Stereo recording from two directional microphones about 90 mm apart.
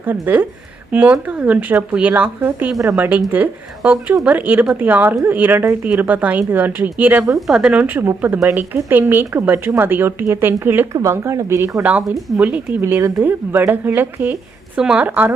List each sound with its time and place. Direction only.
0.0 s a woman's voice: 20° right (ahead or behind)
7.3 s a woman's voice: 5° right (ahead or behind); by 11.8 s 30° right (ahead or behind)
11.8 s speech: 15° right (ahead or behind)
12.8 s a woman's voice: 30° right (ahead or behind)
14.8 s speech: 10° right (ahead or behind)
15.0 s a woman's voice: 20° right (ahead or behind)